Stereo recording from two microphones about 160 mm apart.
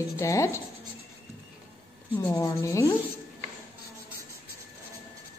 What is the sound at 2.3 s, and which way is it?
Speech, 20° left (ahead or behind).